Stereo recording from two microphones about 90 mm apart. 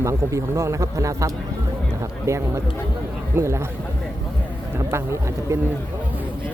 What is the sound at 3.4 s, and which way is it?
Speech, 30° right (ahead or behind).